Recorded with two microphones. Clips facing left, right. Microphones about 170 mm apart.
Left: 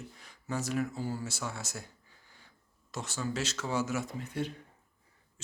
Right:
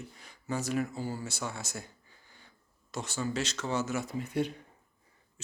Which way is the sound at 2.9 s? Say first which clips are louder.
Right 2 dB; centre (ahead or behind).